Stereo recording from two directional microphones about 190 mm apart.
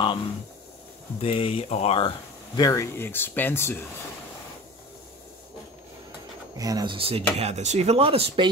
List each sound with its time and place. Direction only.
1.2 s speech: 30° left (ahead or behind); by 3.8 s 10° left (ahead or behind)
6.5 s speech: 20° right (ahead or behind)